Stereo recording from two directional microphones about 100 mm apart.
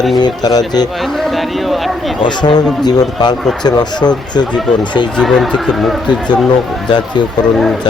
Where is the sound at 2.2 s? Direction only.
50° left (ahead or behind).